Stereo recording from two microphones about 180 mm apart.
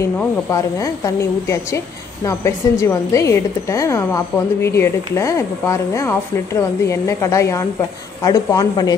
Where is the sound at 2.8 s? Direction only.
15° left (ahead or behind).